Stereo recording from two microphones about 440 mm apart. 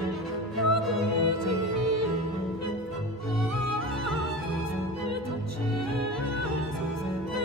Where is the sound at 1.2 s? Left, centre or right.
Right.